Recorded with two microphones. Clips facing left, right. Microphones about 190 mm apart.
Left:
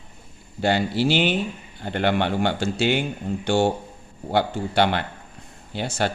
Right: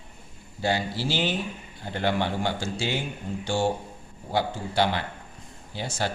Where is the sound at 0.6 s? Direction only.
65° left (ahead or behind).